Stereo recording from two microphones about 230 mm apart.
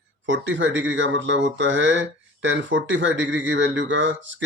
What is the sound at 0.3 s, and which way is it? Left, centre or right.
Speech, right.